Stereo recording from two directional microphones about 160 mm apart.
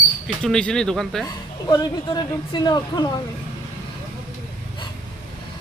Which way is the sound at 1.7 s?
25° left (ahead or behind).